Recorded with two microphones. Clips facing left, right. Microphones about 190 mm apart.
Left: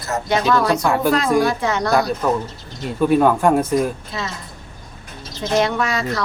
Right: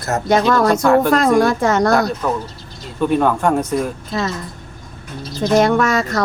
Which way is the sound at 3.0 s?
5° left (ahead or behind).